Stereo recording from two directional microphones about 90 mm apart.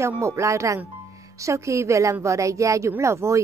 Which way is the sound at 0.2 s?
35° right (ahead or behind).